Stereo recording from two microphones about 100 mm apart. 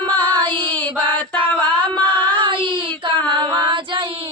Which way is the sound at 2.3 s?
55° right (ahead or behind).